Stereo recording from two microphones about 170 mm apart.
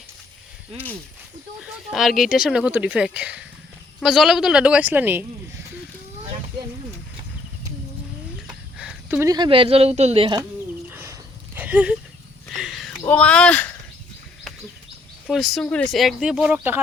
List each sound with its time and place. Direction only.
1.6 s speech: 5° right (ahead or behind)
8.4 s a sound: 5° right (ahead or behind)
9.3 s speech: 30° right (ahead or behind)
10.8 s a sound: 15° right (ahead or behind)
13.1 s speech: 5° left (ahead or behind)
15.3 s speech: centre (ahead or behind)